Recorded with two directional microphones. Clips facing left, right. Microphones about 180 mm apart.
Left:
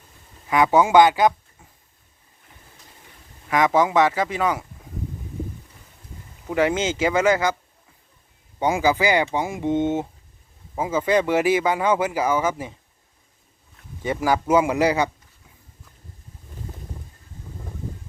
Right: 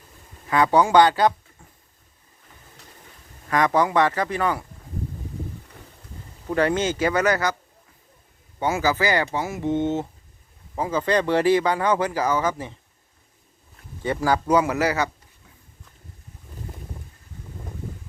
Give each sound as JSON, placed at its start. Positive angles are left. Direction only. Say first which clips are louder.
{"t": 0.5, "sound": "speech", "louder": "left 1 dB", "side_deg": 10}
{"t": 3.5, "sound": "speech", "louder": "left 1 dB", "side_deg": 10}
{"t": 6.5, "sound": "speech", "louder": "even", "side_deg": 15}
{"t": 7.0, "sound": "speech", "louder": "left 4 dB", "side_deg": 10}
{"t": 8.5, "sound": "speech", "louder": "left 2 dB", "side_deg": 15}
{"t": 14.0, "sound": "speech", "louder": "even", "side_deg": 15}